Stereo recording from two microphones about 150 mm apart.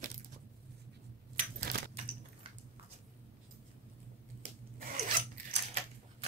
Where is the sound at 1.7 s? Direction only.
90° right.